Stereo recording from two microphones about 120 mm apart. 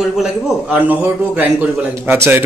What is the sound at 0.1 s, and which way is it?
A man's voice, 5° right (ahead or behind).